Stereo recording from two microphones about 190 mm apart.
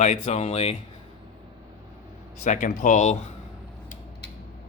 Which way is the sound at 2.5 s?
45° left (ahead or behind).